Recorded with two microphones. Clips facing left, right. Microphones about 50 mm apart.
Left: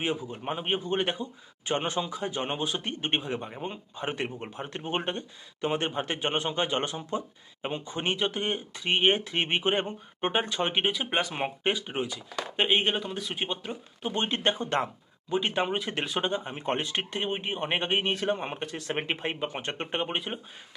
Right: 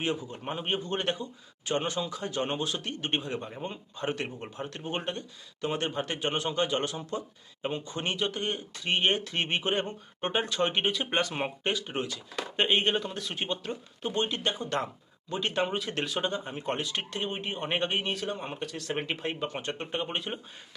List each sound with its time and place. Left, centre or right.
0.0 s speech: centre
1.6 s speech: left
14.2 s speech: left
15.3 s speech: centre
19.6 s speech: left
20.1 s speech: centre